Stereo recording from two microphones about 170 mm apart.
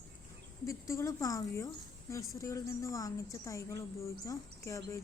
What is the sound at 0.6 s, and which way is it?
Speech, 20° left (ahead or behind).